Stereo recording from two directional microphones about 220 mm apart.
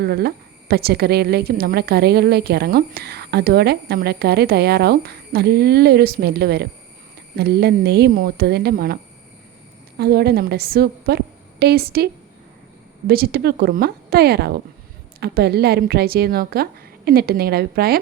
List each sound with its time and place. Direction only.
0.0 s speech: 45° right (ahead or behind)
10.0 s speech: 45° right (ahead or behind)
13.1 s speech: 45° right (ahead or behind)